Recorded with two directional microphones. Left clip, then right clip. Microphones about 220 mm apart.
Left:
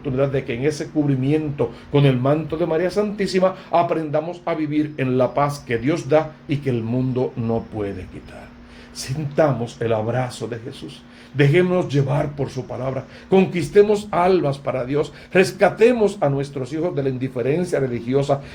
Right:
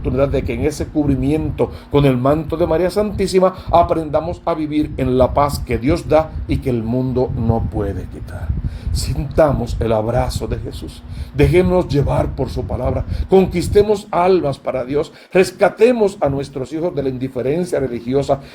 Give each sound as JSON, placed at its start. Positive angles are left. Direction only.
{"t": 0.0, "sound": "speech", "side_deg": -40}
{"t": 9.0, "sound": "speech", "side_deg": -40}
{"t": 11.3, "sound": "speech", "side_deg": -40}